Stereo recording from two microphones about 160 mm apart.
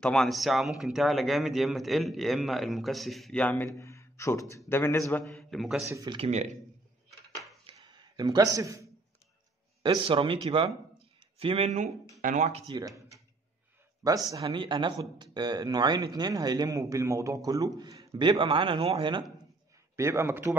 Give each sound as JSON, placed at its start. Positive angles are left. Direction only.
{"t": 0.0, "sound": "speech", "side_deg": 5}
{"t": 5.2, "sound": "speech", "side_deg": 0}
{"t": 5.9, "sound": "speech", "side_deg": -20}
{"t": 6.1, "sound": "a man's voice", "side_deg": -40}
{"t": 7.1, "sound": "dishes", "side_deg": 0}
{"t": 7.6, "sound": "a sound", "side_deg": -25}
{"t": 9.8, "sound": "speech", "side_deg": -35}
{"t": 12.6, "sound": "speech", "side_deg": -25}
{"t": 20.0, "sound": "a man's voice", "side_deg": -15}